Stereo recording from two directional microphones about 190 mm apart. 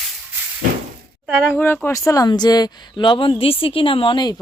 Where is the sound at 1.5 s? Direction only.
10° left (ahead or behind).